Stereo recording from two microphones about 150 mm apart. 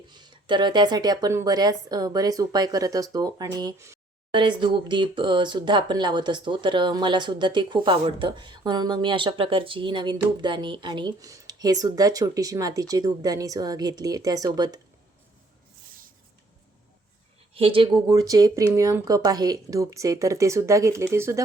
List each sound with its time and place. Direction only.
0.1 s speech: 30° right (ahead or behind)
4.3 s speech: 30° right (ahead or behind)
17.5 s speech: 40° right (ahead or behind)
18.1 s speech: 25° right (ahead or behind)